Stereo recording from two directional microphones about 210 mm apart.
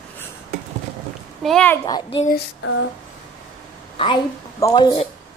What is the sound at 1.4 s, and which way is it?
Speech, 5° left (ahead or behind).